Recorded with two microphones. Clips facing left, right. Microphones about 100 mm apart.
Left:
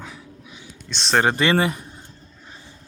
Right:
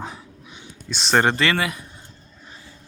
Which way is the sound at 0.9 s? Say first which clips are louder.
Right 1 dB; centre (ahead or behind).